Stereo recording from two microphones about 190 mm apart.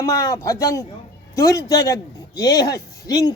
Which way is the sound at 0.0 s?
15° left (ahead or behind).